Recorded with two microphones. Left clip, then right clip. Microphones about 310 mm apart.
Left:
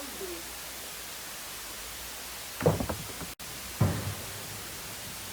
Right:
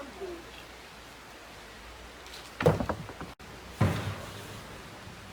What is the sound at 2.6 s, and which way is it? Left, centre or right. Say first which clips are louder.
Door: right 2 dB; centre.